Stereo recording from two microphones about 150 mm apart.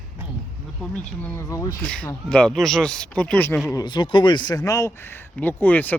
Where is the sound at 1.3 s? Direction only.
20° left (ahead or behind).